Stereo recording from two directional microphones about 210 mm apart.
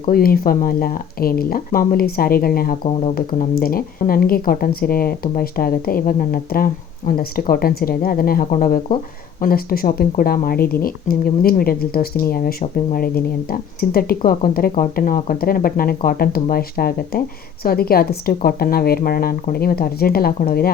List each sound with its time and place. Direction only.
0.1 s speech: 45° left (ahead or behind)